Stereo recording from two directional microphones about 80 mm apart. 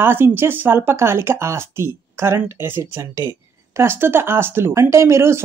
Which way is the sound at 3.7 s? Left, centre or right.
Right.